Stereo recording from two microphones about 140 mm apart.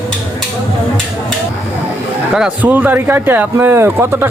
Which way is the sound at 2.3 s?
10° right (ahead or behind).